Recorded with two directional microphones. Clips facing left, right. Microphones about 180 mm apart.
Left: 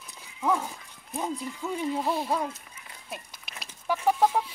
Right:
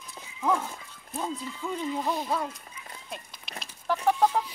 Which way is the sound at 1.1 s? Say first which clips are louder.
Left 1 dB; 15° left (ahead or behind).